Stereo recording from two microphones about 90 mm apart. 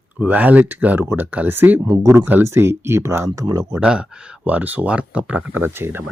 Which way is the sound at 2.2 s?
20° right (ahead or behind).